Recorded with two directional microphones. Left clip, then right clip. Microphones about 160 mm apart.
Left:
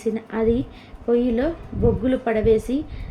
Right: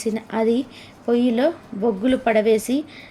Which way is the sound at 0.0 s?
30° right (ahead or behind).